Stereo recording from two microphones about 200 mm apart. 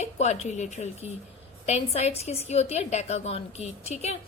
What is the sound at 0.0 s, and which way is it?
A woman's voice, 35° left (ahead or behind).